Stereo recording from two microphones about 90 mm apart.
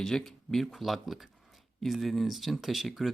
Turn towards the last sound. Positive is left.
turn(degrees=0)  # may be behind; listen again after turning